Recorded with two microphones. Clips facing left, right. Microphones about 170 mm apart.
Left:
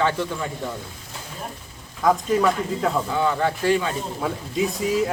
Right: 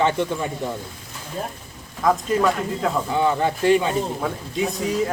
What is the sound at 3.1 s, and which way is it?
Speech, 20° right (ahead or behind).